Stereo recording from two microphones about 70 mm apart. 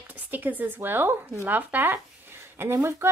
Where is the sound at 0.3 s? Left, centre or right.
Right.